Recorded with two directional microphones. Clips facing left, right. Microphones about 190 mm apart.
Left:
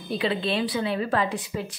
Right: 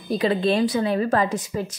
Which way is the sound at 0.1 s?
45° right (ahead or behind).